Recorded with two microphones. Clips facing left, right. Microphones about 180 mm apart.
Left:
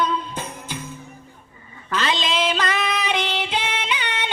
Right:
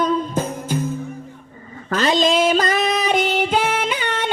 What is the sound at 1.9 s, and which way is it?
Music, 45° right (ahead or behind).